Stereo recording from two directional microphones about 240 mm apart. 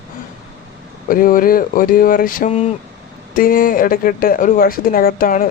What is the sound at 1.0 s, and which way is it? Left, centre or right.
Speech, left.